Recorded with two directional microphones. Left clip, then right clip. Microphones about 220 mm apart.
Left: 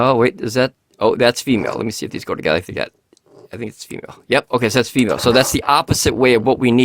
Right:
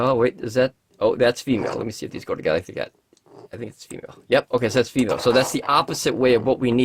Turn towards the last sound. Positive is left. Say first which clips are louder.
# left 5 dB
turn(degrees=40)  # may be behind; listen again after turning